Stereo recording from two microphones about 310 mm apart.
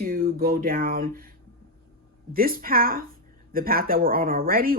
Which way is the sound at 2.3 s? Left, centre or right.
Right.